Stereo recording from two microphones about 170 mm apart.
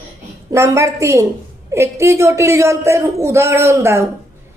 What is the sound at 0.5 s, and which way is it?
A woman's voice, 15° right (ahead or behind).